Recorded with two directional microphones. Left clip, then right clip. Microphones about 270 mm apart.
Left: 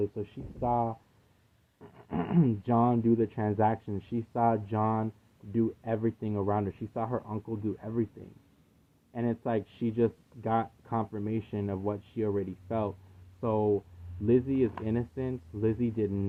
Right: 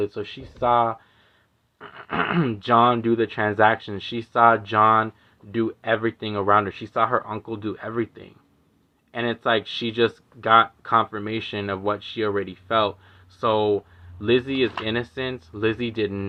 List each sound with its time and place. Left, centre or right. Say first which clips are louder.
0.6 s speech: right 10 dB; right
7.8 s speech: right 9 dB; centre
9.2 s speech: right 10 dB; right